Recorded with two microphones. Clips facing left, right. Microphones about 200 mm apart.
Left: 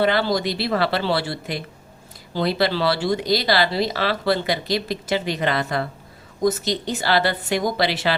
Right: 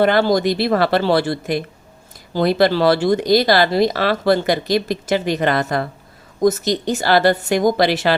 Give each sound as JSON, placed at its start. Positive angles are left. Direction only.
{"t": 0.0, "sound": "speech", "side_deg": -50}